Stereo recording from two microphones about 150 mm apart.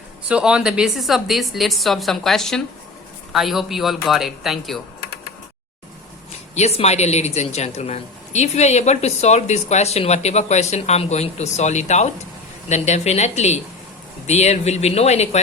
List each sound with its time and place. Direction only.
0.3 s a woman's voice: 5° right (ahead or behind)
6.5 s speech: 45° left (ahead or behind)